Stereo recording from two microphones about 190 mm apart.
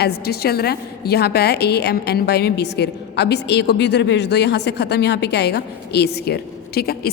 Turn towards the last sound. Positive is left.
turn(degrees=55)  # may be behind; listen again after turning